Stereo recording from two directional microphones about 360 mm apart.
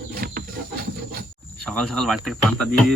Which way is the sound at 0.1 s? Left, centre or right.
Right.